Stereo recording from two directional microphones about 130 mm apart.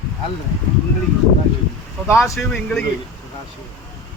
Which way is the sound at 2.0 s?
Centre (ahead or behind).